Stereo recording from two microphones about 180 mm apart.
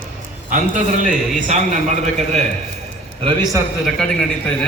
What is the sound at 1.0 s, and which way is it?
Speech, 45° right (ahead or behind).